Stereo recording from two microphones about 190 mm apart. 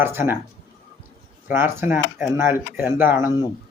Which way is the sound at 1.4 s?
10° right (ahead or behind).